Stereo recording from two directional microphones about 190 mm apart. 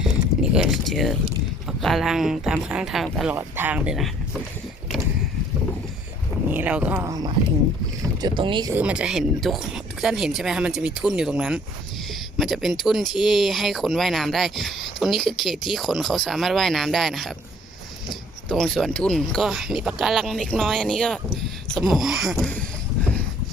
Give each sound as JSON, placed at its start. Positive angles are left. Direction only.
{"t": 0.0, "sound": "speech", "side_deg": -5}
{"t": 6.5, "sound": "speech", "side_deg": -10}
{"t": 8.7, "sound": "speech", "side_deg": -5}